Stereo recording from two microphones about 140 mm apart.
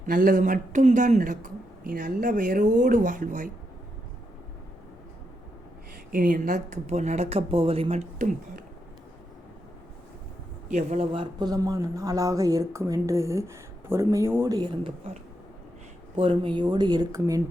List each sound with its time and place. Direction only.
0.0 s speech: 75° right (ahead or behind)
6.1 s speech: 80° right; by 8.3 s 50° right (ahead or behind)
10.7 s speech: 55° right (ahead or behind); by 14.6 s 20° right (ahead or behind)
16.1 s speech: 40° right (ahead or behind)